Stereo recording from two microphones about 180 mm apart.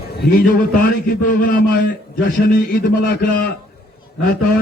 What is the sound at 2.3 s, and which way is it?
Speech, 55° left (ahead or behind).